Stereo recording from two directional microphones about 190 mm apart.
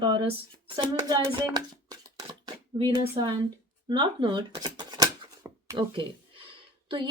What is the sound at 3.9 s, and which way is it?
Speech, 25° right (ahead or behind).